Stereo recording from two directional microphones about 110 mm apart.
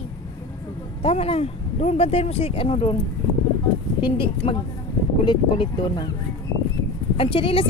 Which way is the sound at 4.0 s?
50° left (ahead or behind).